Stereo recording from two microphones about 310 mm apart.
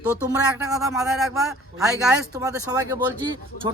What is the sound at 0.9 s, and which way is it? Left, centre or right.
Speech, centre.